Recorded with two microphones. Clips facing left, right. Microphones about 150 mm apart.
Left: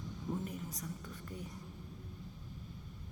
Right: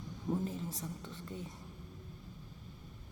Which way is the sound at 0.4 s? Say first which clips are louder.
Right 3 dB; 30° right (ahead or behind).